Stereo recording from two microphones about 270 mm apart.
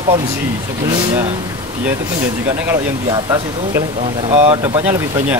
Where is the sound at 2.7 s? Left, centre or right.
Centre.